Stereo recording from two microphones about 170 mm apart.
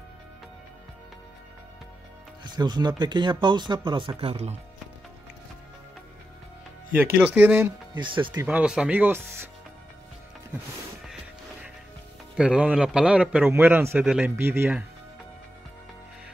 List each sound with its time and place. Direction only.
2.4 s speech: 25° right (ahead or behind)
7.2 s a man's voice: 10° right (ahead or behind)
7.9 s speech: 30° right (ahead or behind)
8.3 s a man's voice: 10° right (ahead or behind)
12.4 s a man's voice: 5° right (ahead or behind)